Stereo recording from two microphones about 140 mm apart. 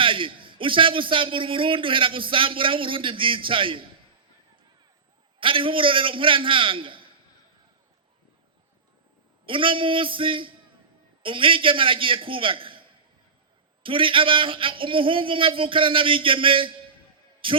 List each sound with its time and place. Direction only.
0.0 s a man's voice: 40° right (ahead or behind)
5.4 s a man's voice: 40° right (ahead or behind)
9.5 s a man's voice: 40° right (ahead or behind)
13.8 s a man's voice: 40° right (ahead or behind)